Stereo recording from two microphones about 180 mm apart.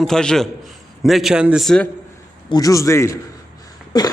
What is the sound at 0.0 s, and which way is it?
A man's voice, 5° left (ahead or behind).